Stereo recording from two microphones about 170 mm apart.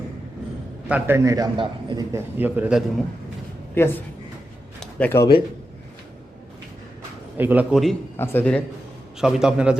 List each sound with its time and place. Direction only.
0.9 s a man's voice: 10° right (ahead or behind)
2.1 s a man's voice: 10° right (ahead or behind)
3.8 s speech: 15° left (ahead or behind)
4.8 s a sound: 10° left (ahead or behind)
7.3 s a man's voice: 10° right (ahead or behind)
8.1 s speech: 15° left (ahead or behind)
9.1 s a man's voice: 5° right (ahead or behind)